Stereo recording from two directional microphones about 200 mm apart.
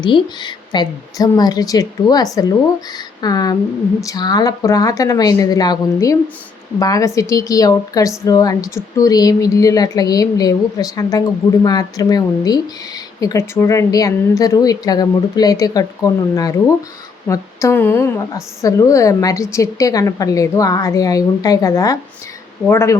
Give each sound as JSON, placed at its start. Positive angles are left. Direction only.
{"t": 0.0, "sound": "a woman's voice", "side_deg": 20}